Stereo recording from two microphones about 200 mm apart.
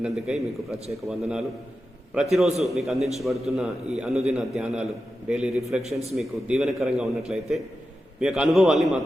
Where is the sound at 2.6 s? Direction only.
Centre (ahead or behind).